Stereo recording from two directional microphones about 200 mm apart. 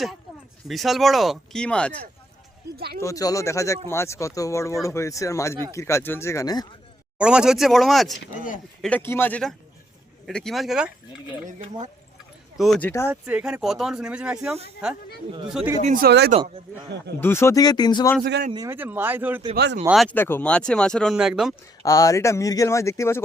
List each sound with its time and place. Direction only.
0.7 s speech: centre (ahead or behind)
2.7 s speech: 50° right (ahead or behind)
3.0 s speech: 15° left (ahead or behind)
7.2 s speech: 5° right (ahead or behind)
12.5 s speech: centre (ahead or behind)
15.8 s speech: 45° right (ahead or behind)
17.2 s speech: 10° left (ahead or behind)
18.5 s speech: 15° right (ahead or behind)
20.1 s speech: 10° left (ahead or behind)
21.8 s speech: 15° left (ahead or behind)